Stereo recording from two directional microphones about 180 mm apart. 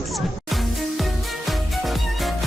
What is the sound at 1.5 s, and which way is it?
Music, centre (ahead or behind).